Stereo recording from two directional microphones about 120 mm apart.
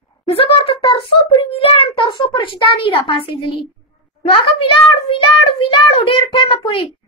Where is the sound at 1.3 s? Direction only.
50° left (ahead or behind).